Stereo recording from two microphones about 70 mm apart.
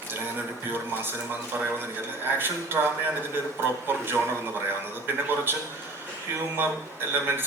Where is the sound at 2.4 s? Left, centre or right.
Right.